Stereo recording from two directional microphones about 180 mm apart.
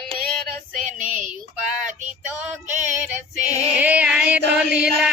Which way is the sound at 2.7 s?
40° right (ahead or behind).